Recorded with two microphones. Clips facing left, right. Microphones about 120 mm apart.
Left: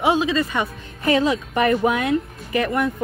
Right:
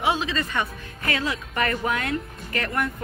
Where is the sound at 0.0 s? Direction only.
20° left (ahead or behind).